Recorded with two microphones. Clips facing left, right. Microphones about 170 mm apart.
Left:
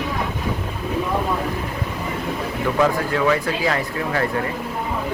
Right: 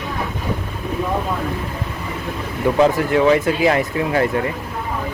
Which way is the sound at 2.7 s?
25° right (ahead or behind).